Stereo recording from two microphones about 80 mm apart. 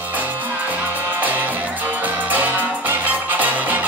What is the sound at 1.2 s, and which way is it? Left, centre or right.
Music, right.